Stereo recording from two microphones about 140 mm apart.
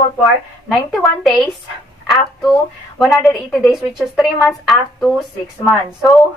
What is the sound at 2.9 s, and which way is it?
A woman's voice, centre (ahead or behind).